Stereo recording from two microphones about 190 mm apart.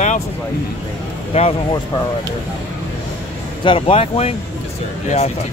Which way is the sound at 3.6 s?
30° left (ahead or behind).